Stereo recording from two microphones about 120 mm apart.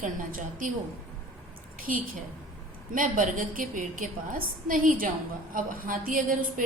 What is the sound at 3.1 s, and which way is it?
Speech, 90° right.